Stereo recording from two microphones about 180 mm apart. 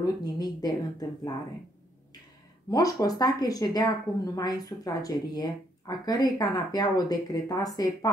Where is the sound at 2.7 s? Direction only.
20° left (ahead or behind).